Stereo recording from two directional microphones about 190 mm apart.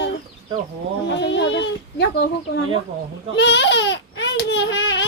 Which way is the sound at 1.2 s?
70° left (ahead or behind).